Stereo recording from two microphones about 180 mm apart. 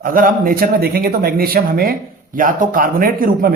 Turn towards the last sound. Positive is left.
turn(degrees=-50)  # may be behind; listen again after turning